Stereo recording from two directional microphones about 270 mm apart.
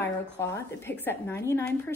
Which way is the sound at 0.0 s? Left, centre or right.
Centre.